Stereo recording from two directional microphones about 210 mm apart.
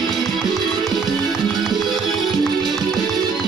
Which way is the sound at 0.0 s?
Centre (ahead or behind).